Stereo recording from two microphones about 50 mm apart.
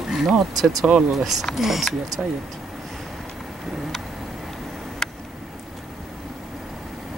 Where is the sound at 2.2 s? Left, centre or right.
Right.